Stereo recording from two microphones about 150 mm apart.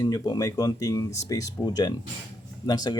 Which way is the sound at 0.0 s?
25° left (ahead or behind).